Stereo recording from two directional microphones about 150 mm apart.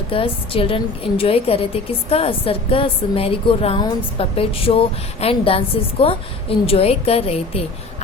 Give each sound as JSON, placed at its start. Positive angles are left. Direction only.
{"t": 0.1, "sound": "a woman's voice", "side_deg": 35}